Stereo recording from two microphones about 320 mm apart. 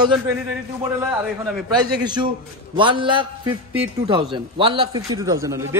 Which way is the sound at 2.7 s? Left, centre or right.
Centre.